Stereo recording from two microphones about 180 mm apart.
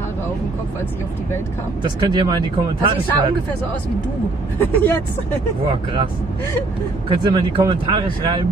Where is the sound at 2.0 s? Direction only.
25° right (ahead or behind).